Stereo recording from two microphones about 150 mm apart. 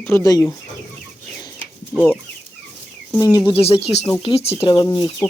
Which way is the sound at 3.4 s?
40° left (ahead or behind).